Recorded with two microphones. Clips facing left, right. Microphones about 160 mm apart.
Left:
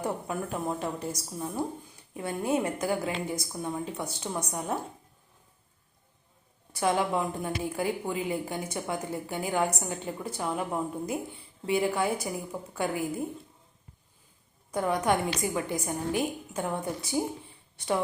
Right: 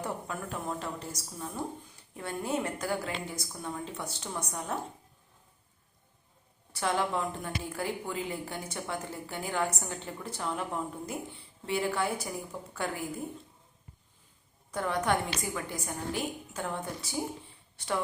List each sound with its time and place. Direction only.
0.0 s a woman's voice: 15° left (ahead or behind)
6.7 s a woman's voice: 15° left (ahead or behind)
14.7 s a woman's voice: 15° left (ahead or behind)